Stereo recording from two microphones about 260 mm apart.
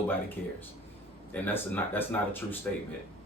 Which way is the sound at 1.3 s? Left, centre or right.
Centre.